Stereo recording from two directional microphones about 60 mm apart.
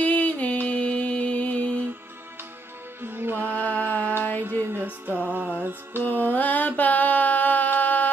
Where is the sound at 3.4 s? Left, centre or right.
Left.